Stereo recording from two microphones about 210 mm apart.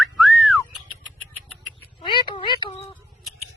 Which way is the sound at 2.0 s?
20° left (ahead or behind).